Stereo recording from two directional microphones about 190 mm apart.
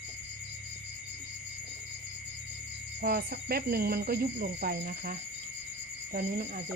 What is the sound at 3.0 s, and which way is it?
Speech, 50° right (ahead or behind).